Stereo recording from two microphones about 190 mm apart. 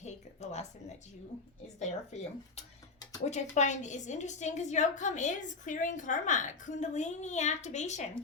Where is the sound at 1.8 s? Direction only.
35° left (ahead or behind).